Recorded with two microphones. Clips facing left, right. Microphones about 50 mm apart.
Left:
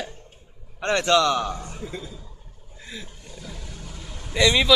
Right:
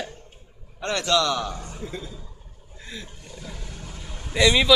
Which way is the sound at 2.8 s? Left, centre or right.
Centre.